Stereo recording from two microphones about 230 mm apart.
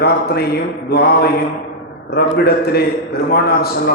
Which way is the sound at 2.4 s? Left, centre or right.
Left.